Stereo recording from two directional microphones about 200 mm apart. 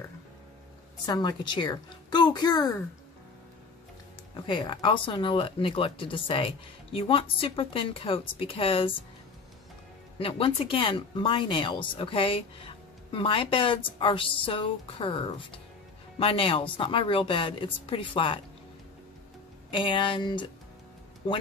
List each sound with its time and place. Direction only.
1.0 s speech: 20° left (ahead or behind)
4.5 s speech: 25° left (ahead or behind)
10.1 s speech: 25° left (ahead or behind)
19.7 s speech: 25° left (ahead or behind)